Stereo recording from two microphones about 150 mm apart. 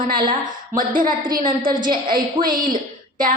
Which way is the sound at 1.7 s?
30° right (ahead or behind).